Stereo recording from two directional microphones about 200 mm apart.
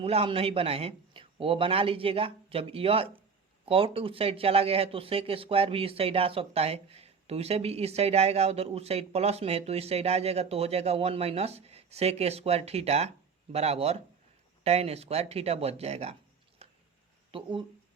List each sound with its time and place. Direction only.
0.0 s a man's voice: 30° right (ahead or behind)
16.6 s a sound: 30° right (ahead or behind)
17.3 s a man's voice: 25° right (ahead or behind)